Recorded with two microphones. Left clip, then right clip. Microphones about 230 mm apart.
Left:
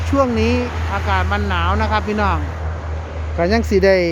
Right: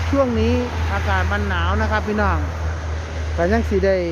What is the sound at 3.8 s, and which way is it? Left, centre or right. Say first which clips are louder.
Speech: left 6 dB; centre.